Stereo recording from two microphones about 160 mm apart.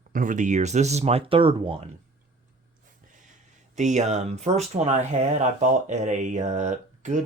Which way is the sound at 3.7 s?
50° right (ahead or behind).